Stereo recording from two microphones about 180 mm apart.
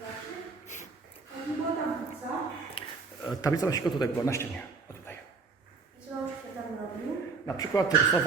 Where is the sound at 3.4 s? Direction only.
20° left (ahead or behind).